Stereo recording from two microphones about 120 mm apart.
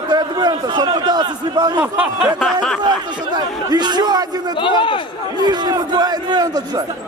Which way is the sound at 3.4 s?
35° right (ahead or behind).